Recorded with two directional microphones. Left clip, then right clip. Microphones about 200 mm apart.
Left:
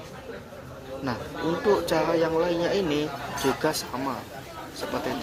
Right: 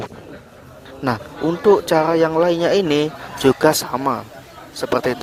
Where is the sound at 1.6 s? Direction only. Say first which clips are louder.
Right 10 dB; 50° right (ahead or behind).